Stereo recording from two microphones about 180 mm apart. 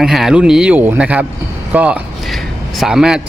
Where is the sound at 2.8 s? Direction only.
5° right (ahead or behind).